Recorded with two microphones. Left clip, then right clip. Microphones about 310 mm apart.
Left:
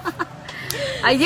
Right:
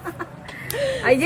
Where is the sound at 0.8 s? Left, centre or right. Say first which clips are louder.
Right 3 dB; right.